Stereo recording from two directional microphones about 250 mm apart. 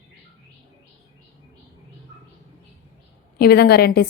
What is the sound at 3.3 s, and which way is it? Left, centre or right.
Speech, left.